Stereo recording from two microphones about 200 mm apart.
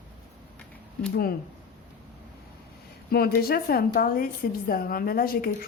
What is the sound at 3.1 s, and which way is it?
Speech, 50° left (ahead or behind).